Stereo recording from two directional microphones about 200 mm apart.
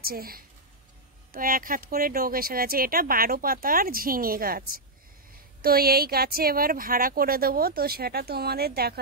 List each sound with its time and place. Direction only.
0.0 s speech: 45° right (ahead or behind)